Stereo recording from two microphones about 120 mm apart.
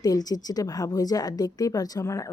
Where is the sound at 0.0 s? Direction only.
30° left (ahead or behind).